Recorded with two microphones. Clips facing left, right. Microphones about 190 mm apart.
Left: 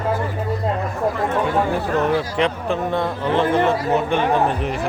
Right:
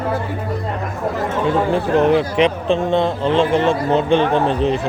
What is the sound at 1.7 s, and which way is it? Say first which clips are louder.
Speech: right 5 dB; 25° right (ahead or behind).